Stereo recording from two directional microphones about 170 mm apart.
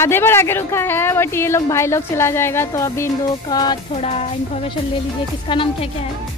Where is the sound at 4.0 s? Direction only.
35° left (ahead or behind).